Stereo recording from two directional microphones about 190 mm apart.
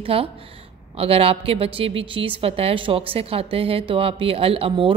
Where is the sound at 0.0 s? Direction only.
30° right (ahead or behind).